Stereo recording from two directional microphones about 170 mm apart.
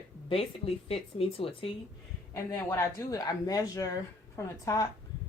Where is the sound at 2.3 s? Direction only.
15° left (ahead or behind).